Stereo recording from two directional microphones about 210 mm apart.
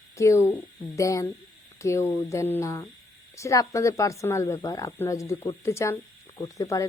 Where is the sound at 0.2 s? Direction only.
15° left (ahead or behind).